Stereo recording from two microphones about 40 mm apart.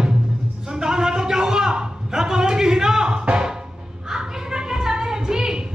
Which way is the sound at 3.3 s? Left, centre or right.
Right.